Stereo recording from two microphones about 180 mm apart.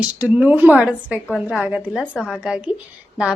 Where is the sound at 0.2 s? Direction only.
10° right (ahead or behind).